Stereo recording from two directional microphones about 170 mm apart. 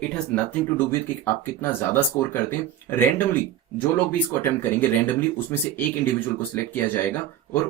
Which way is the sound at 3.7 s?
10° left (ahead or behind).